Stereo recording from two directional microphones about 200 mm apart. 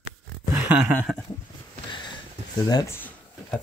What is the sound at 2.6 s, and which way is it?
Speech, 20° left (ahead or behind).